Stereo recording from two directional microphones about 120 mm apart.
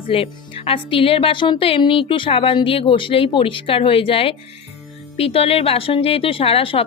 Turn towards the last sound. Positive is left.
turn(degrees=50)  # may be behind; listen again after turning